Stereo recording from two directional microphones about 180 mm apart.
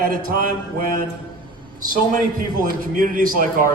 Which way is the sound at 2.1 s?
50° right (ahead or behind).